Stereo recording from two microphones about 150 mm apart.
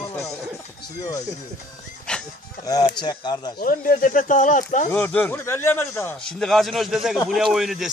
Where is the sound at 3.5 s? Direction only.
70° left (ahead or behind).